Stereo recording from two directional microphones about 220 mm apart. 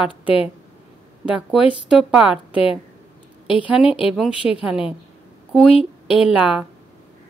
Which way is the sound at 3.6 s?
5° right (ahead or behind).